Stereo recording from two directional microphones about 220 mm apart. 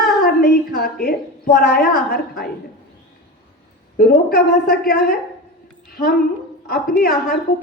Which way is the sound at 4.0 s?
45° left (ahead or behind).